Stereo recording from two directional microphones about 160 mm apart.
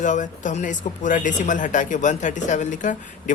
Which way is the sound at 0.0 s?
50° left (ahead or behind).